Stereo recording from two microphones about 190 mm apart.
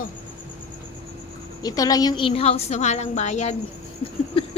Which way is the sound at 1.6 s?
20° left (ahead or behind).